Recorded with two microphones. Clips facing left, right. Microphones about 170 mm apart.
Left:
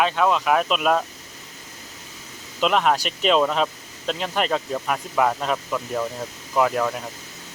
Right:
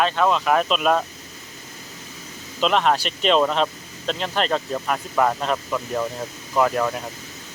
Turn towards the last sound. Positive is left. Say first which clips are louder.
# right 1 dB
turn(degrees=0)  # may be behind; listen again after turning